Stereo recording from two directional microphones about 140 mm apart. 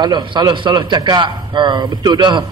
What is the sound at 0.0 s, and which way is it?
A man's voice, 35° right (ahead or behind).